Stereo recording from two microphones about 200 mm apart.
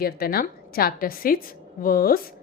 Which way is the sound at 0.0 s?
50° left (ahead or behind).